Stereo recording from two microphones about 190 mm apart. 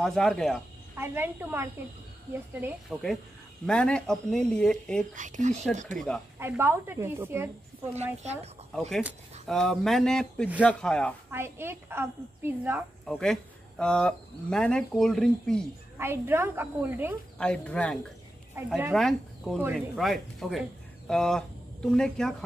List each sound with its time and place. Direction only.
0.0 s speech: centre (ahead or behind)
0.9 s a woman's voice: 10° right (ahead or behind)
2.9 s speech: centre (ahead or behind)
5.1 s speech: 40° right (ahead or behind)
5.9 s speech: 5° left (ahead or behind)
6.4 s a woman's voice: 10° right (ahead or behind)
7.9 s speech: 35° right (ahead or behind)
9.0 s speech: centre (ahead or behind)
11.2 s a woman's voice: 10° right (ahead or behind)
13.0 s speech: centre (ahead or behind)
16.0 s a woman's voice: 10° right (ahead or behind)
17.4 s speech: 5° left (ahead or behind)
18.6 s a woman's voice: 10° right (ahead or behind)
18.9 s speech: centre (ahead or behind)